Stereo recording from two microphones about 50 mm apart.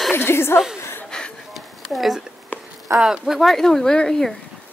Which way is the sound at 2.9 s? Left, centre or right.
Right.